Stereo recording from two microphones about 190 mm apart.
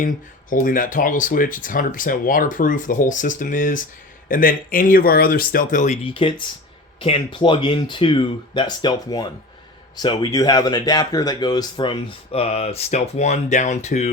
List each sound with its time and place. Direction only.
0.5 s speech: 45° left (ahead or behind)